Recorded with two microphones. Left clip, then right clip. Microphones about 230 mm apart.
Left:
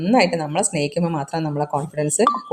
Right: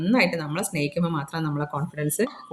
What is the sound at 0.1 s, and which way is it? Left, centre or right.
Speech, centre.